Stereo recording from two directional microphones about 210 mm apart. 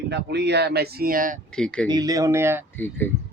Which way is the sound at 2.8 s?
10° left (ahead or behind).